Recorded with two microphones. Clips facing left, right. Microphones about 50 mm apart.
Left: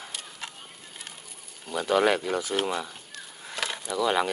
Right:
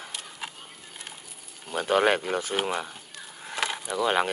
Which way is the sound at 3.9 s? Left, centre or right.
Right.